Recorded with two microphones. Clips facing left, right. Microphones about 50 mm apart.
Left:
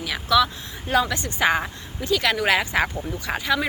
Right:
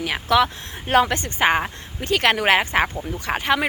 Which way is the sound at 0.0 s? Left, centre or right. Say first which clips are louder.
Right 2 dB; right.